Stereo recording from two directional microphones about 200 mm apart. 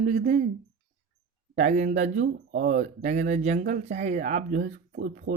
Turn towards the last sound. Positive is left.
turn(degrees=-45)  # may be behind; listen again after turning